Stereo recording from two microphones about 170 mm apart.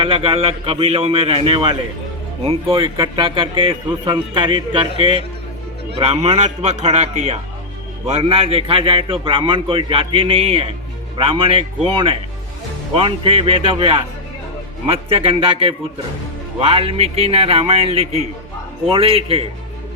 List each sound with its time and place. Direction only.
0.0 s a man's voice: 35° right (ahead or behind)
6.2 s a man's voice: 35° right (ahead or behind)
12.9 s a man's voice: 35° right (ahead or behind)